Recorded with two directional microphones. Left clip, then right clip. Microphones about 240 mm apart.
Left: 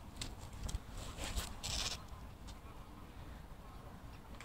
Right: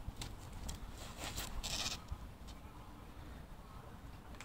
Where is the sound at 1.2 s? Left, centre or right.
Centre.